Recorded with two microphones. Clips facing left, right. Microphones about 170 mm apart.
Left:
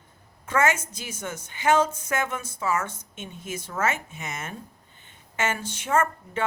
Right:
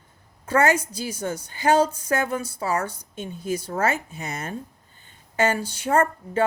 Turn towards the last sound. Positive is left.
turn(degrees=-35)  # may be behind; listen again after turning